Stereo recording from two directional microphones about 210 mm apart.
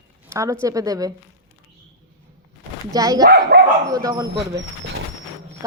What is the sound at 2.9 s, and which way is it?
Speech, 15° right (ahead or behind).